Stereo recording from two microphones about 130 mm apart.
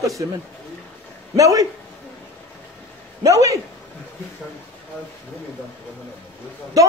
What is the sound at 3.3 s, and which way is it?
Speech, 25° right (ahead or behind).